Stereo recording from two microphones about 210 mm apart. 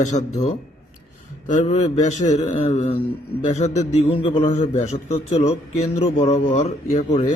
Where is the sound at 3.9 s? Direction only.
30° left (ahead or behind).